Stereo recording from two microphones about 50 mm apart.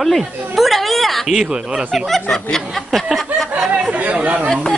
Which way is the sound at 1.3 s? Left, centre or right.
Centre.